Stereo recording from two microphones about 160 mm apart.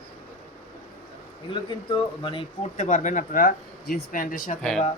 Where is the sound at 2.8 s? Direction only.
50° left (ahead or behind).